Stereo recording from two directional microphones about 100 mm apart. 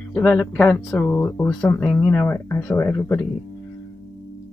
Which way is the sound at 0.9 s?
20° left (ahead or behind).